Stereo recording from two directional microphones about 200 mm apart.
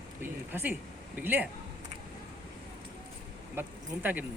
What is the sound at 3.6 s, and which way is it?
Speech, 10° right (ahead or behind).